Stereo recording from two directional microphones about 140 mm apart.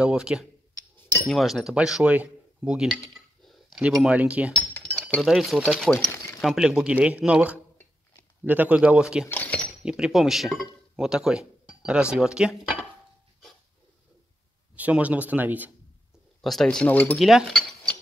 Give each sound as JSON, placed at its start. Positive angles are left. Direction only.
{"t": 0.0, "sound": "speech", "side_deg": -5}
{"t": 1.0, "sound": "chink", "side_deg": 15}
{"t": 1.3, "sound": "speech", "side_deg": 0}
{"t": 4.5, "sound": "chink", "side_deg": 10}
{"t": 5.2, "sound": "speech", "side_deg": 0}
{"t": 9.2, "sound": "keys jangling", "side_deg": 15}
{"t": 9.8, "sound": "speech", "side_deg": -5}
{"t": 14.8, "sound": "speech", "side_deg": -10}
{"t": 16.3, "sound": "speech", "side_deg": 0}
{"t": 17.2, "sound": "cutlery", "side_deg": 0}